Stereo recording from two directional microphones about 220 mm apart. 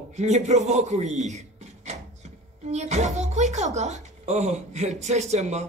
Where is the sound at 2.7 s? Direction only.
30° right (ahead or behind).